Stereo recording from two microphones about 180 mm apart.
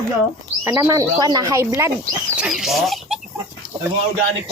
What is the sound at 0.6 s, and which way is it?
Speech, 15° right (ahead or behind).